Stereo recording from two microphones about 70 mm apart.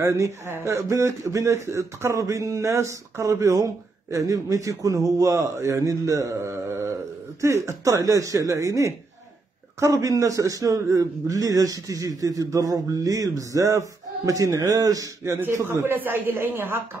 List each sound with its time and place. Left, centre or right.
0.0 s speech: right
9.9 s a man's voice: right
15.4 s speech: right